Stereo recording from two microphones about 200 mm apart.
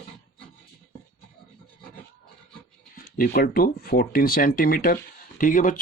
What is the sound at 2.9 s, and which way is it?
Speech, 45° left (ahead or behind).